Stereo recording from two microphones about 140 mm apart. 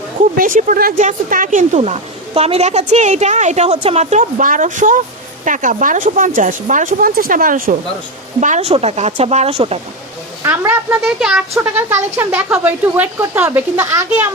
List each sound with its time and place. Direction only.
0.3 s speech: 70° right (ahead or behind)
8.4 s speech: 55° right (ahead or behind)
10.4 s speech: 15° right (ahead or behind)
11.0 s speech: 5° right (ahead or behind); by 14.0 s 20° right (ahead or behind)